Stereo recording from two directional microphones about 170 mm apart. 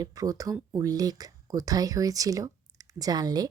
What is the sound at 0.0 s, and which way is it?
Speech, 20° right (ahead or behind).